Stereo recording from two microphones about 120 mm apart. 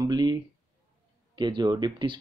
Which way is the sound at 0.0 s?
35° right (ahead or behind).